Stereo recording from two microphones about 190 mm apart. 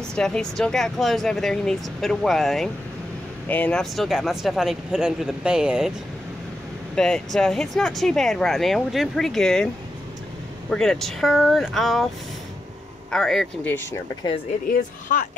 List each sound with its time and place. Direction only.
0.1 s speech: 5° left (ahead or behind)
7.0 s speech: 5° left (ahead or behind)
10.7 s speech: centre (ahead or behind)
13.1 s speech: centre (ahead or behind)
14.7 s speech: 40° left (ahead or behind)